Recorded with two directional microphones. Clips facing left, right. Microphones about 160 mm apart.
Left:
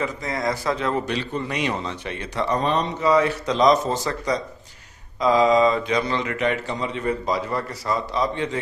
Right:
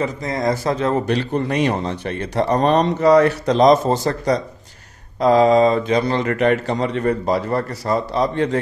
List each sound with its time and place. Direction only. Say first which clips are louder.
0.4 s a man's voice: right 5 dB; 40° right (ahead or behind)
7.8 s a man's voice: right 3 dB; 35° right (ahead or behind)